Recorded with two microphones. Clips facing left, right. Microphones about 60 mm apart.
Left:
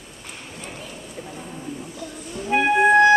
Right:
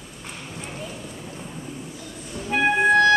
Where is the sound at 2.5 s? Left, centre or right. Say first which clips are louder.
Left 2 dB; left.